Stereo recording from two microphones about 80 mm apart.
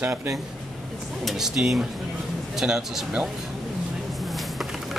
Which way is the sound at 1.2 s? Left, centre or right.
Centre.